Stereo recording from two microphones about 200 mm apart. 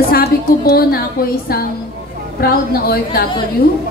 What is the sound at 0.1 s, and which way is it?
A woman's voice, 50° left (ahead or behind).